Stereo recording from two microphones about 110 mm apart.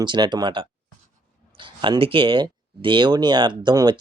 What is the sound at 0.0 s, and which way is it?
Speech, 45° right (ahead or behind).